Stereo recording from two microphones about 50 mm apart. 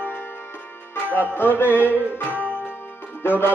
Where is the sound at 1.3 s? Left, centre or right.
Left.